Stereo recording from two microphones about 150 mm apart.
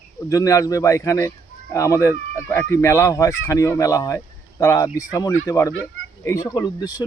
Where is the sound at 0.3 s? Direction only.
20° left (ahead or behind).